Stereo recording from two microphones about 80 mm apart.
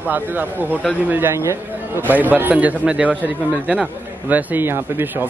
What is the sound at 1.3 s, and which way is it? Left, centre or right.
Speech, right.